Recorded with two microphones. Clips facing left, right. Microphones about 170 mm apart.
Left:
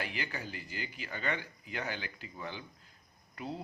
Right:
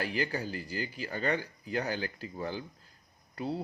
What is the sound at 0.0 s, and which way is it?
Speech, 40° right (ahead or behind).